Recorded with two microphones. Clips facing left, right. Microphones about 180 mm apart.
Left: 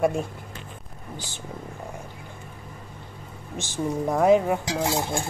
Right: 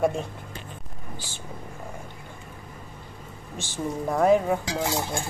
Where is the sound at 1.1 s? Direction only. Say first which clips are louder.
Left 3 dB; 15° left (ahead or behind).